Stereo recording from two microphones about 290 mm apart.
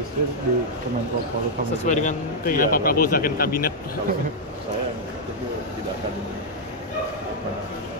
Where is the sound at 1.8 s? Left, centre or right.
Left.